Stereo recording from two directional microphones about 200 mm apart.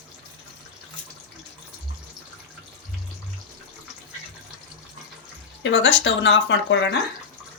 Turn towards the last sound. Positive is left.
turn(degrees=65)  # may be behind; listen again after turning